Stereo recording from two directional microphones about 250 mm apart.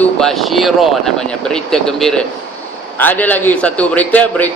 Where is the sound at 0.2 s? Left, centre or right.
Centre.